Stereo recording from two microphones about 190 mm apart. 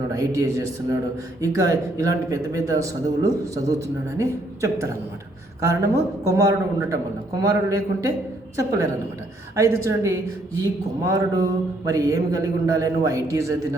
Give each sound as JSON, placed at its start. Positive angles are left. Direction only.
{"t": 0.1, "sound": "a man's voice", "side_deg": -15}
{"t": 9.6, "sound": "a man's voice", "side_deg": -15}